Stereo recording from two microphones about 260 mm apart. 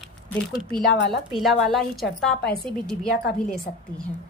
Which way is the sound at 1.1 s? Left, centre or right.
Centre.